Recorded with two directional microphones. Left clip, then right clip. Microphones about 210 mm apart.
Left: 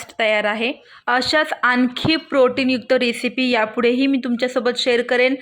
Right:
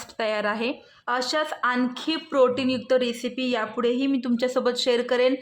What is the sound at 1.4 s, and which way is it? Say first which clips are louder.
Speech: left 7 dB; 25° left (ahead or behind).